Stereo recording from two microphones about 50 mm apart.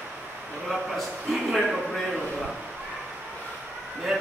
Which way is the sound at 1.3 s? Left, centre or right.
Centre.